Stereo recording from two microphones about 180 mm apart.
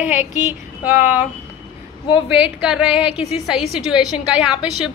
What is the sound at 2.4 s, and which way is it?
A woman's voice, 5° right (ahead or behind).